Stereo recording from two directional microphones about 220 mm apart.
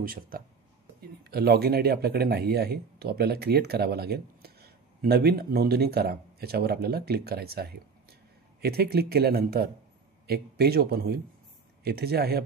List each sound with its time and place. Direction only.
0.0 s a man's voice: 40° right (ahead or behind)